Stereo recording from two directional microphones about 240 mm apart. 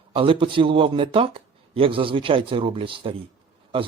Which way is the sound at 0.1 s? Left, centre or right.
Right.